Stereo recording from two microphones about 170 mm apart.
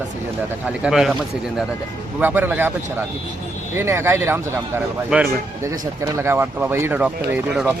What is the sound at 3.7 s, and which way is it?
Speech, 15° right (ahead or behind).